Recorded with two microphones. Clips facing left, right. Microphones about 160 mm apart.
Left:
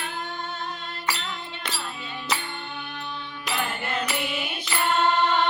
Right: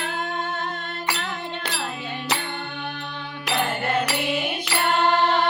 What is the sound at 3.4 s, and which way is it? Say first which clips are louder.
Music: right 6 dB; 70° right (ahead or behind).